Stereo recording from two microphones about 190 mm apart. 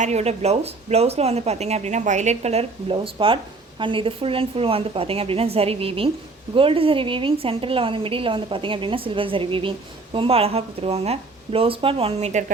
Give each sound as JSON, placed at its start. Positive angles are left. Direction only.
{"t": 0.0, "sound": "a woman's voice", "side_deg": -35}